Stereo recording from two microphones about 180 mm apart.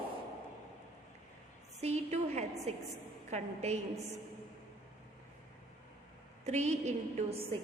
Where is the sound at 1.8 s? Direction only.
40° right (ahead or behind).